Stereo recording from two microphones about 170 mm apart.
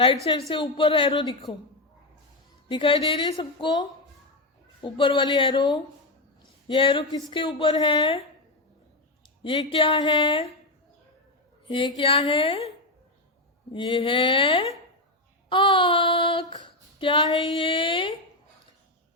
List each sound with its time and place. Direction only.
0.5 s a woman's voice: 30° left (ahead or behind)
2.6 s a woman's voice: 30° left (ahead or behind)
9.4 s a woman's voice: 30° left (ahead or behind)
11.9 s a woman's voice: 30° left (ahead or behind)
13.7 s a woman's voice: 30° left (ahead or behind)